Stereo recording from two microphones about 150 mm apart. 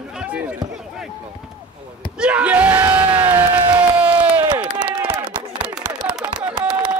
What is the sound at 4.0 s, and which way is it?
Crowd, 10° right (ahead or behind).